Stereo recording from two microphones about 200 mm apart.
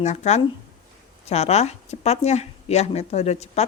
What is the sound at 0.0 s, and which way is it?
A woman's voice, 35° left (ahead or behind).